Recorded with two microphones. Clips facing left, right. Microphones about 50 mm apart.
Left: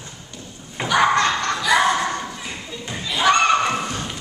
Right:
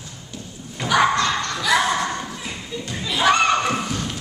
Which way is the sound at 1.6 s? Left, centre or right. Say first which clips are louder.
Left 1 dB; centre.